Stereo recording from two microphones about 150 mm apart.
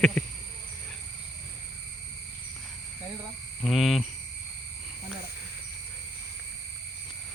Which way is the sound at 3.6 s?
Centre (ahead or behind).